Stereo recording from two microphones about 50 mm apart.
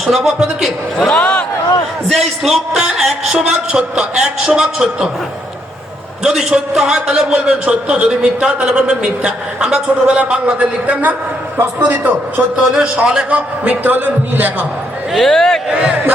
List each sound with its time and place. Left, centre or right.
0.0 s a sound: centre
1.2 s a sound: left
2.1 s a sound: centre
2.8 s music: centre
3.3 s a man's voice: right
6.2 s a man's voice: centre; by 12.5 s right
12.7 s a man's voice: centre
13.8 s a man's voice: right
15.2 s speech: centre
15.7 s a man's voice: centre